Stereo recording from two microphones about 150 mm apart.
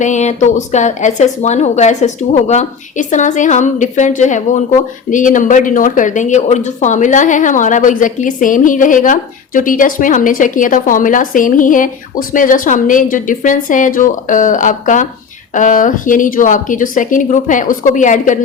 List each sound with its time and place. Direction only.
0.0 s speech: 50° left (ahead or behind)